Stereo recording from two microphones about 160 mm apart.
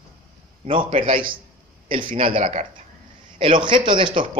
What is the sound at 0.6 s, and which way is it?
A man's voice, 35° right (ahead or behind).